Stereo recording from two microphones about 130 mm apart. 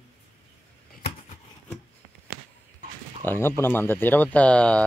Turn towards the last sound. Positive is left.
turn(degrees=10)  # may be behind; listen again after turning